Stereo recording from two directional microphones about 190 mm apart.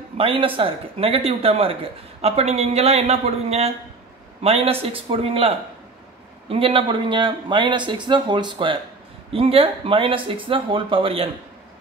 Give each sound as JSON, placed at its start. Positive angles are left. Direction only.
{"t": 0.2, "sound": "speech", "side_deg": -30}
{"t": 6.5, "sound": "a man's voice", "side_deg": -30}